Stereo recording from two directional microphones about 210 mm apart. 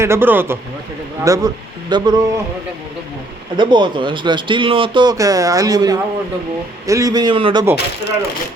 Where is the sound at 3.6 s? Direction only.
20° right (ahead or behind).